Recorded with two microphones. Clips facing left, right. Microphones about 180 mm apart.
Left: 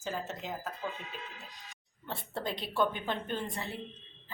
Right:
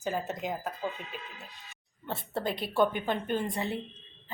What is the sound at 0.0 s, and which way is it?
Speech, 15° right (ahead or behind).